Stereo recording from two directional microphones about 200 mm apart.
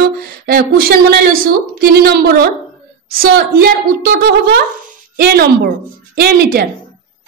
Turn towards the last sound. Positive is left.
turn(degrees=-50)  # may be behind; listen again after turning